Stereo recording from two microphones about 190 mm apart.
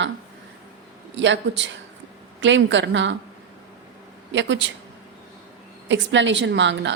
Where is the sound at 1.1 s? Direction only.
70° right (ahead or behind).